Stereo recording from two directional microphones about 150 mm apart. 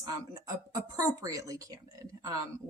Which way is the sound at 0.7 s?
25° right (ahead or behind).